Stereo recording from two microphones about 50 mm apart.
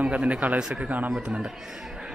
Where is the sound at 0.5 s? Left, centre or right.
Centre.